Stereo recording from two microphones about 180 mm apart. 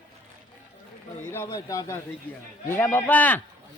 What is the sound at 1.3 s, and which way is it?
Speech, 15° left (ahead or behind).